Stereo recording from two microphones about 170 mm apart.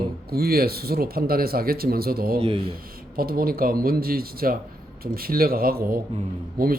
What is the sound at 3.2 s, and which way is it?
Speech, 60° right (ahead or behind).